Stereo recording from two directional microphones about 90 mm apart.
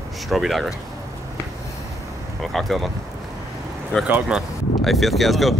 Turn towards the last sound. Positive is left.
turn(degrees=0)  # may be behind; listen again after turning